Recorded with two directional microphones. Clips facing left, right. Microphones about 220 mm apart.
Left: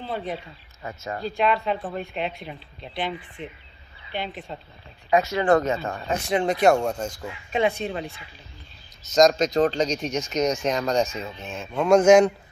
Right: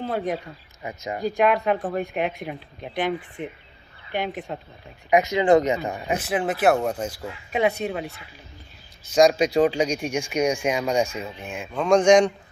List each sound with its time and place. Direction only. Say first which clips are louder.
0.1 s speech: even; 15° right (ahead or behind)
6.2 s speech: left 2 dB; 5° right (ahead or behind)
9.1 s speech: right 1 dB; 10° right (ahead or behind)
11.7 s speech: left 1 dB; 5° left (ahead or behind)